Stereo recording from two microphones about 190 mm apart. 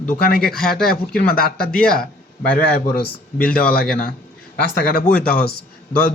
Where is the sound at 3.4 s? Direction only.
5° left (ahead or behind).